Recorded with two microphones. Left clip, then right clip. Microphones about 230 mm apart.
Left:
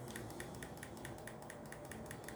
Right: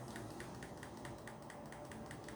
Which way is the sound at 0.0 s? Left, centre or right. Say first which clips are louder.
Left 1 dB; left.